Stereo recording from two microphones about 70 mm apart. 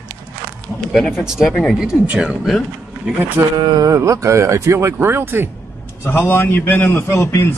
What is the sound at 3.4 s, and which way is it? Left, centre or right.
Speech, right.